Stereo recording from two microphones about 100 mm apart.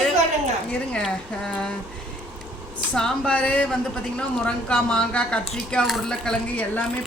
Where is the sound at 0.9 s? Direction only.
5° left (ahead or behind).